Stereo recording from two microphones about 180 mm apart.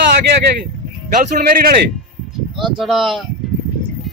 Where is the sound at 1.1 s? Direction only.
45° right (ahead or behind).